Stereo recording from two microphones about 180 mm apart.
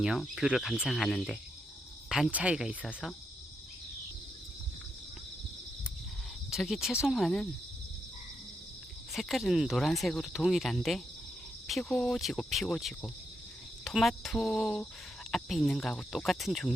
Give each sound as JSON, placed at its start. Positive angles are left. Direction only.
{"t": 0.0, "sound": "speech", "side_deg": 0}
{"t": 6.5, "sound": "speech", "side_deg": 0}
{"t": 9.1, "sound": "speech", "side_deg": 0}